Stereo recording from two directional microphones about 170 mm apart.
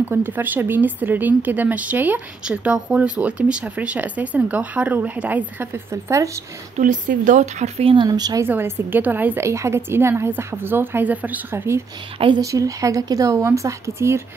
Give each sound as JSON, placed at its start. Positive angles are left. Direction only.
{"t": 0.1, "sound": "speech", "side_deg": -10}
{"t": 6.8, "sound": "a woman's voice", "side_deg": -50}